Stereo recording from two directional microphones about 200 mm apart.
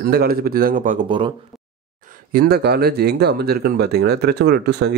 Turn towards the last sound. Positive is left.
turn(degrees=-55)  # may be behind; listen again after turning